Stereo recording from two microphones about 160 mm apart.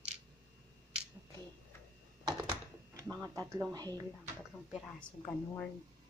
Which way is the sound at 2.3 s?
25° right (ahead or behind).